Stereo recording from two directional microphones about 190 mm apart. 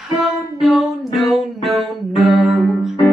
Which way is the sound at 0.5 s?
Centre (ahead or behind).